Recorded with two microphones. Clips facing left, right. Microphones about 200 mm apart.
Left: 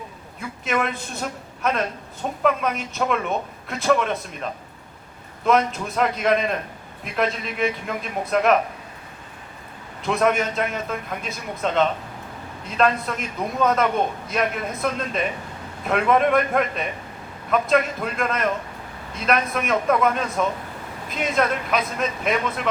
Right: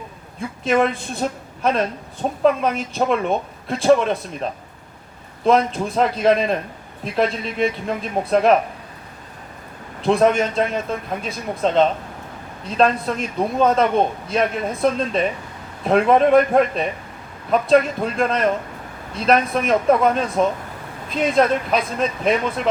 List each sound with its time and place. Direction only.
0.6 s speech: 30° right (ahead or behind)
5.5 s speech: 30° right (ahead or behind)
10.0 s speech: 30° right (ahead or behind)